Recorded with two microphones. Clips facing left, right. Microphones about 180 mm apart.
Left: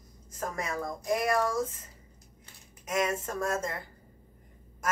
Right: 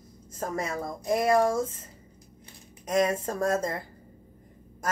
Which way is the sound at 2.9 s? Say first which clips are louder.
Right 5 dB; 35° right (ahead or behind).